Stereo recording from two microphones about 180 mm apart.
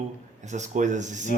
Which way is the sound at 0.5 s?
40° right (ahead or behind).